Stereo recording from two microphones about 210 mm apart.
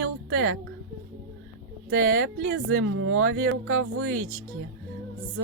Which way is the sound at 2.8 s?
70° right (ahead or behind).